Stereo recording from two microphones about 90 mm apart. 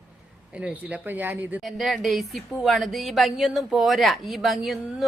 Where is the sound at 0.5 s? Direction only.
15° right (ahead or behind).